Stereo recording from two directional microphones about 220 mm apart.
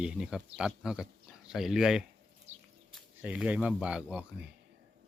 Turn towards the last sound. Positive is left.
turn(degrees=-5)  # may be behind; listen again after turning